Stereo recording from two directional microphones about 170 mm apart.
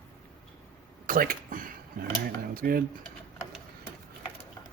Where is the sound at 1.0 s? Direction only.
55° right (ahead or behind).